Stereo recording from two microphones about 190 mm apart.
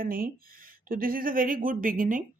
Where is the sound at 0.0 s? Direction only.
50° right (ahead or behind).